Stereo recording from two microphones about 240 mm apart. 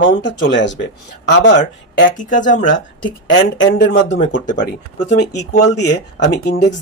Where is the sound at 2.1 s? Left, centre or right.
Left.